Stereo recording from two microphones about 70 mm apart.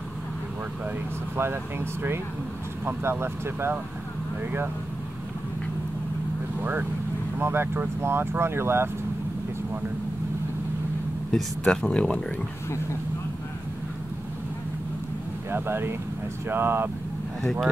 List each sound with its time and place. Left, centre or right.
1.3 s speech: right
6.6 s speech: right
11.3 s speech: centre
11.8 s speech: centre
15.5 s speech: right